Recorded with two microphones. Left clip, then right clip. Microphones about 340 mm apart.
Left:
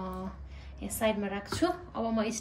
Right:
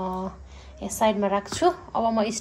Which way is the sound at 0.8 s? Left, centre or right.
Centre.